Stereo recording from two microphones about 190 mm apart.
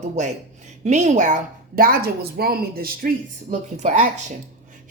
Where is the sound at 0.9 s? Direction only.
40° right (ahead or behind).